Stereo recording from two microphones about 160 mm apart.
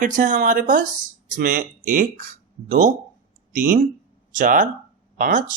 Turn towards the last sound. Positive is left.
turn(degrees=-60)  # may be behind; listen again after turning